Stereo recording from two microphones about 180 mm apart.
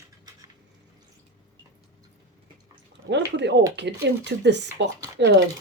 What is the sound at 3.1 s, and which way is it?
Speech, 75° right (ahead or behind).